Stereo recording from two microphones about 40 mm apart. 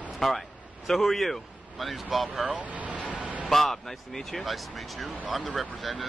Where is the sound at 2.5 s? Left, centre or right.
Right.